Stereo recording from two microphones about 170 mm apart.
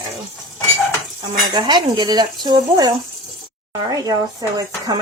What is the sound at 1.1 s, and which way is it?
Speech, 25° right (ahead or behind).